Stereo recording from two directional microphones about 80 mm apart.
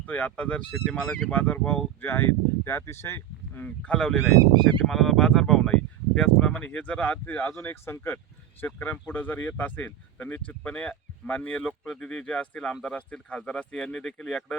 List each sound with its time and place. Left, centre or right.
0.0 s speech: centre
3.8 s speech: centre
7.5 s speech: left; by 14.4 s centre